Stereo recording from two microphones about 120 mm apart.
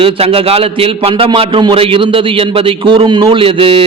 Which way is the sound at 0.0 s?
50° right (ahead or behind).